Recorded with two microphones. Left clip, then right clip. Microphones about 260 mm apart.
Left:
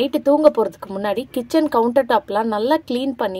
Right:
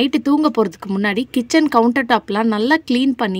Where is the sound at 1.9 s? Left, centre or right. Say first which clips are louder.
Even; right.